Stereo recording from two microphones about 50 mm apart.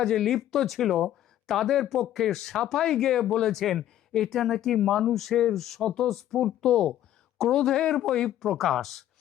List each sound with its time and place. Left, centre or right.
0.0 s speech: centre
6.7 s speech: centre
8.4 s speech: centre